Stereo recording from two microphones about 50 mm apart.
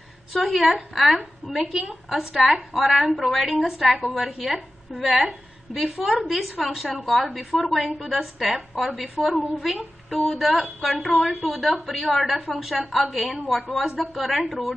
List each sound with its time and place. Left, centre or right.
0.3 s a woman's voice: centre
1.1 s a woman's voice: centre
2.7 s a woman's voice: centre